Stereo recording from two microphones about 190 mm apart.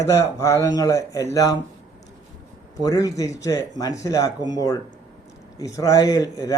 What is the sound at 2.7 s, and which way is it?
A man's voice, 15° left (ahead or behind).